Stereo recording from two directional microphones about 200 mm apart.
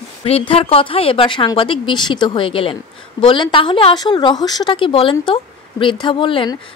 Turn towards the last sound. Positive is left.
turn(degrees=25)  # may be behind; listen again after turning